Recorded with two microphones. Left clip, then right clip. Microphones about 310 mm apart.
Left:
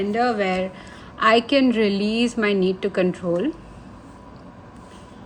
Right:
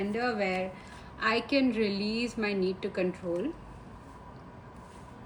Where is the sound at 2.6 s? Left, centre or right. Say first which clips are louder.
Left 9 dB; left.